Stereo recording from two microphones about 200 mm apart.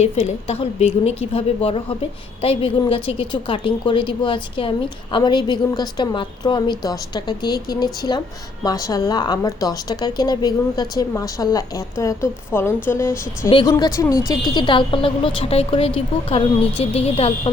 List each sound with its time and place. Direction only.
0.0 s a woman's voice: 35° left (ahead or behind)